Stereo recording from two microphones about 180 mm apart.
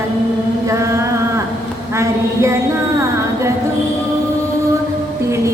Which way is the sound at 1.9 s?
15° right (ahead or behind).